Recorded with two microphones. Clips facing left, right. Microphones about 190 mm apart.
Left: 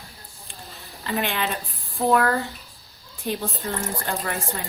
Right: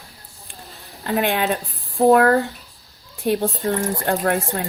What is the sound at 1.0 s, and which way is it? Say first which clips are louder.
Speech: right 6 dB; 50° right (ahead or behind).